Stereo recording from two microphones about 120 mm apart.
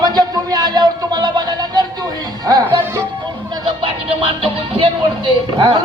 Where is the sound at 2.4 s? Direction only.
30° right (ahead or behind).